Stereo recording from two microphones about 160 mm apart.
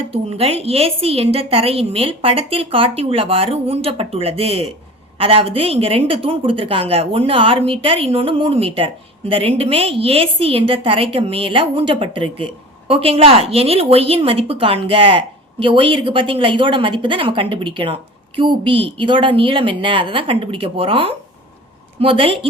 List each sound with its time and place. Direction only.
0.1 s a woman's voice: 40° right (ahead or behind)